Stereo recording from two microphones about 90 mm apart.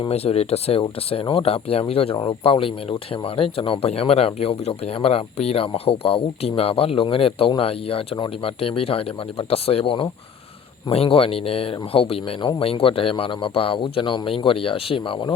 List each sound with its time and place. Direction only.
0.0 s speech: 80° left
10.8 s speech: 90° left